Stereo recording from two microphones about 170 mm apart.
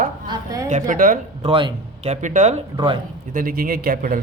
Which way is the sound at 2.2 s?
45° right (ahead or behind).